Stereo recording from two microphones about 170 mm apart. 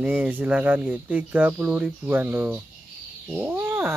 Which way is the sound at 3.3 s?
10° right (ahead or behind).